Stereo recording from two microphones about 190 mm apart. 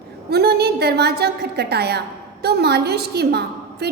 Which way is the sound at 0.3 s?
55° right (ahead or behind).